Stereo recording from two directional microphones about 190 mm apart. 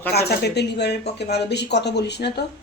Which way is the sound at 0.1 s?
55° left (ahead or behind).